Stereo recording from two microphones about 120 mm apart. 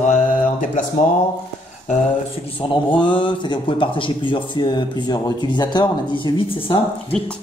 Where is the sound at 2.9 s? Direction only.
40° left (ahead or behind).